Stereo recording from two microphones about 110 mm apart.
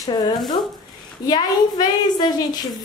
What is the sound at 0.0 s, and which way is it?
A woman's voice, 35° left (ahead or behind).